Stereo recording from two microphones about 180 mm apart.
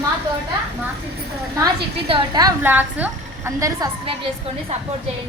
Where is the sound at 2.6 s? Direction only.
10° right (ahead or behind).